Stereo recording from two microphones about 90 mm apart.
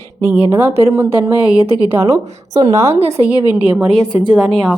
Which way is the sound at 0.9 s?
25° right (ahead or behind).